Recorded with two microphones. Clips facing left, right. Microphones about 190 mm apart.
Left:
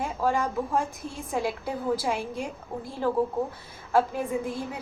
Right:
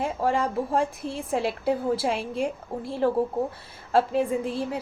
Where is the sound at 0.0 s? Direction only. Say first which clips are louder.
Right 2 dB; 30° right (ahead or behind).